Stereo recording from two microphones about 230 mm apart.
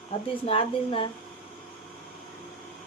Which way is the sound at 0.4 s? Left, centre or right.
Left.